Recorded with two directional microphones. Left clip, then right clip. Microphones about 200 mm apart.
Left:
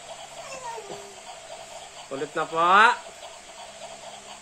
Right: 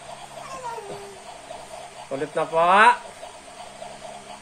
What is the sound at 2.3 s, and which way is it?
Speech, 30° left (ahead or behind).